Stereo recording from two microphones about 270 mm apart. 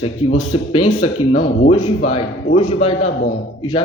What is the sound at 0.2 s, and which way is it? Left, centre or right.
Speech, left.